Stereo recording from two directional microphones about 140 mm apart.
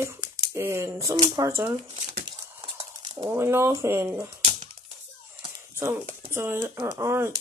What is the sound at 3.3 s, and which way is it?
Speech, 20° right (ahead or behind).